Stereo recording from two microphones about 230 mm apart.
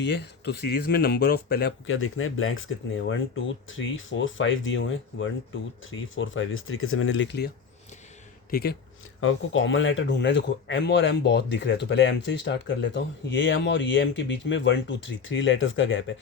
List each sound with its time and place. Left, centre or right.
0.0 s speech: left
2.0 s speech: left
9.2 s speech: left